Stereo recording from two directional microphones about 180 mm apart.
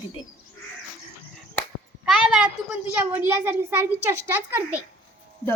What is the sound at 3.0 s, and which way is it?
A child's voice, 10° right (ahead or behind).